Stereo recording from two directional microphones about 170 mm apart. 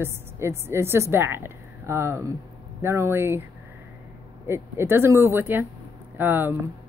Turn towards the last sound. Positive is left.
turn(degrees=-10)  # may be behind; listen again after turning